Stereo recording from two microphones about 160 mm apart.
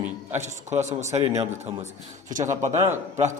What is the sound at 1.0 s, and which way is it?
Speech, 45° right (ahead or behind).